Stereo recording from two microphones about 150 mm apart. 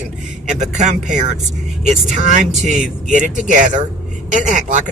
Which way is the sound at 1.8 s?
50° right (ahead or behind).